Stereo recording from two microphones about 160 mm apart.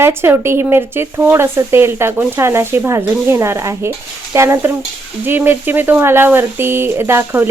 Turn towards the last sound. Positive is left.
turn(degrees=-15)  # may be behind; listen again after turning